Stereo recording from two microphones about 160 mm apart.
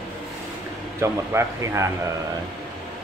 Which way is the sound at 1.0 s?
15° right (ahead or behind).